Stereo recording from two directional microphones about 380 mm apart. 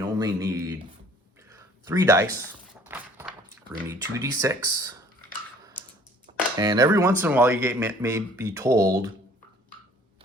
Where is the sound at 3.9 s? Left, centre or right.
Centre.